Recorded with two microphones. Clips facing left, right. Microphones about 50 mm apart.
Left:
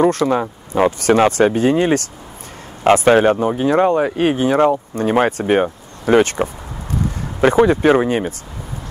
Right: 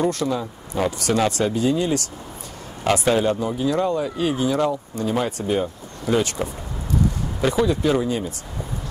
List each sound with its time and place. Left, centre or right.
0.0 s speech: left